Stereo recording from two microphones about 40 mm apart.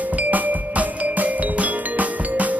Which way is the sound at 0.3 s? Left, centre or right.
Right.